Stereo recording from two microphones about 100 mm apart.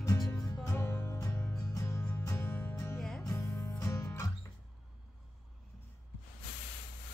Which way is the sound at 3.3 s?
20° left (ahead or behind).